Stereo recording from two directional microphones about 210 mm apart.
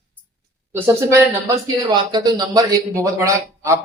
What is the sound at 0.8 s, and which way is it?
Speech, 15° right (ahead or behind).